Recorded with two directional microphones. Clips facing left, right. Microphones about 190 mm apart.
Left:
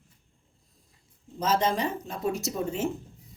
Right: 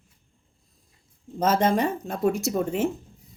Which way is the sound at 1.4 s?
50° right (ahead or behind).